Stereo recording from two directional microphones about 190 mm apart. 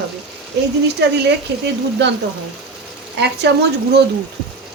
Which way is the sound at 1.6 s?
65° right (ahead or behind).